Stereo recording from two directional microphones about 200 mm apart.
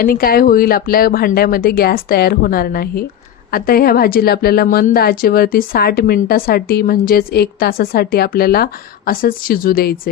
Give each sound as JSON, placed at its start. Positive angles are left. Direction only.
{"t": 0.0, "sound": "a woman's voice", "side_deg": 45}